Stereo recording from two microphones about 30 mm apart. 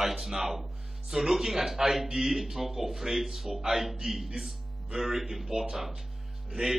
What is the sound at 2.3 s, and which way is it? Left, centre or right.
Speech, centre.